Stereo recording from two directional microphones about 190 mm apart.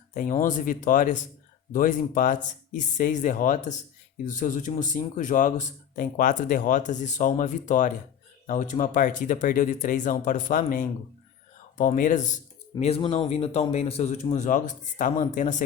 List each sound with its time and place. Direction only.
0.1 s speech: 45° left (ahead or behind)
12.8 s speech: 30° left (ahead or behind)